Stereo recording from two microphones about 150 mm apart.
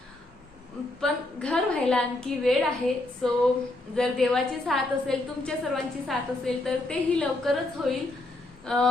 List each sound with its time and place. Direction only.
1.0 s a woman's voice: 5° left (ahead or behind)